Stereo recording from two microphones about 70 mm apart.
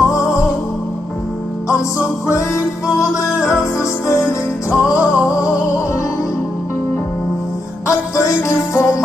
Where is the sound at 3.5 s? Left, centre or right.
Left.